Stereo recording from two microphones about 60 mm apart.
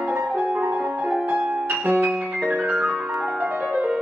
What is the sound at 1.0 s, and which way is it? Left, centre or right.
Music, centre.